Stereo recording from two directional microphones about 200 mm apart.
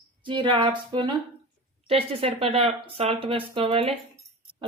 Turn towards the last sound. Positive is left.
turn(degrees=-30)  # may be behind; listen again after turning